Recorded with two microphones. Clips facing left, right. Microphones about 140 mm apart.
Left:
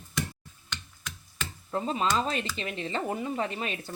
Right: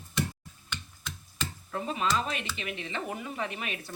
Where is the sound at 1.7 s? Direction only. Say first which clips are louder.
Left 3 dB; 30° left (ahead or behind).